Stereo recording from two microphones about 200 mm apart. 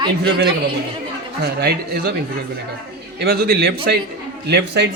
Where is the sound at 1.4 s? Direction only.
55° right (ahead or behind).